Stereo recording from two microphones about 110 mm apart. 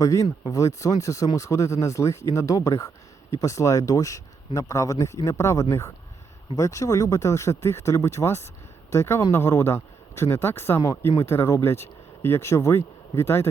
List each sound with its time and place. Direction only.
0.0 s speech: 30° left (ahead or behind)